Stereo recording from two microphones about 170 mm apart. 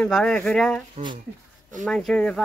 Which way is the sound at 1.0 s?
40° right (ahead or behind).